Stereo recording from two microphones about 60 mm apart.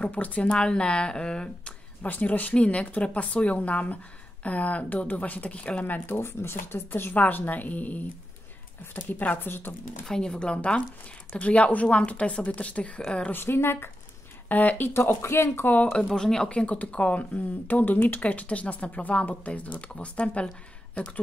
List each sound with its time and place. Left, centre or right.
0.0 s speech: left
2.0 s speech: left
7.2 s speech: left
10.0 s speech: centre
13.3 s speech: left
14.5 s speech: left
15.0 s speech: left
15.6 s speech: left
16.1 s speech: centre
16.4 s speech: left